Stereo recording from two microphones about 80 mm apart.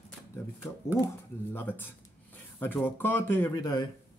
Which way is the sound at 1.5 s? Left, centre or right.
Left.